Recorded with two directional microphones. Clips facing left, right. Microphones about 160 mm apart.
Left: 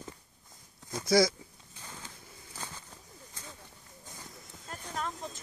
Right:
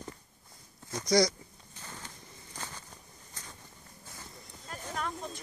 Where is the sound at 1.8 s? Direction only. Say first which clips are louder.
Right 1 dB; 10° left (ahead or behind).